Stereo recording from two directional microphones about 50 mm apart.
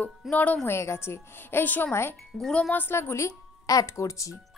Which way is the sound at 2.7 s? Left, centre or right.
Left.